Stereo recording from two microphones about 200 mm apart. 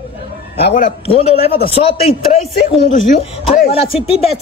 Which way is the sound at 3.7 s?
30° left (ahead or behind).